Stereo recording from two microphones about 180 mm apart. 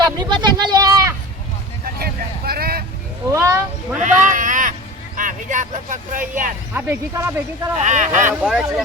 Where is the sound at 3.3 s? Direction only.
15° right (ahead or behind).